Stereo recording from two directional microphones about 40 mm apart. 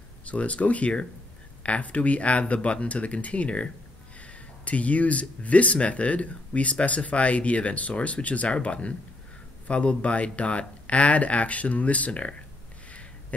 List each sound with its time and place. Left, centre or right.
0.2 s speech: left